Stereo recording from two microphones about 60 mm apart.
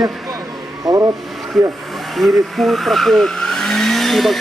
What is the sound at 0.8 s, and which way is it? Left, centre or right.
Speech, right.